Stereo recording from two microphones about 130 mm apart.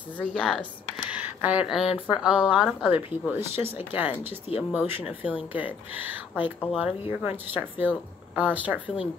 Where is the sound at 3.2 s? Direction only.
15° right (ahead or behind).